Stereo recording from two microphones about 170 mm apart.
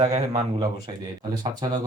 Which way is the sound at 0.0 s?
40° right (ahead or behind).